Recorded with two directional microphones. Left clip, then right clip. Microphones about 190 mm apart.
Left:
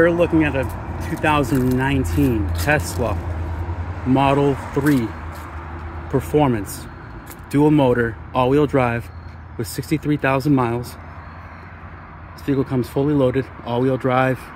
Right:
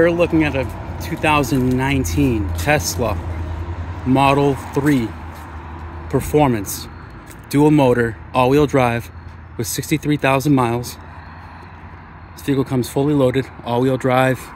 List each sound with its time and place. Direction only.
0.0 s speech: 10° right (ahead or behind)
6.1 s speech: 15° right (ahead or behind)
12.4 s speech: 20° right (ahead or behind)